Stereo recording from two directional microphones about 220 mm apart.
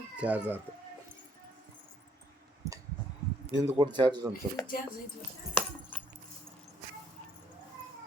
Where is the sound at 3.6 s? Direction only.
15° right (ahead or behind).